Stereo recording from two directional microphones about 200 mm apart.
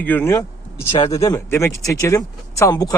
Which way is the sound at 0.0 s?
10° left (ahead or behind).